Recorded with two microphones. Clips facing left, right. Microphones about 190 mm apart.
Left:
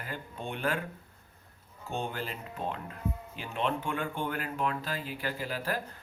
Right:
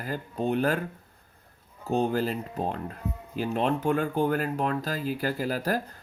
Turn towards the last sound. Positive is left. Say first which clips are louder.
# right 6 dB
turn(degrees=-40)  # may be behind; listen again after turning